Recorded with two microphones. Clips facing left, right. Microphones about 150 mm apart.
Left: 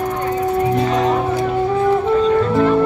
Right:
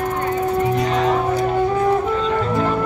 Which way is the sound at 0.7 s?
30° left (ahead or behind).